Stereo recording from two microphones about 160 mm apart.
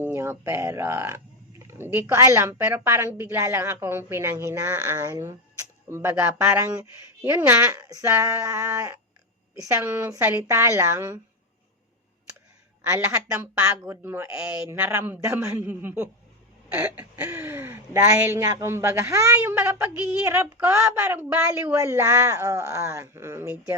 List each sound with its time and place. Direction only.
0.1 s speech: 15° right (ahead or behind)
12.9 s speech: 15° right (ahead or behind)
21.8 s speech: 20° right (ahead or behind)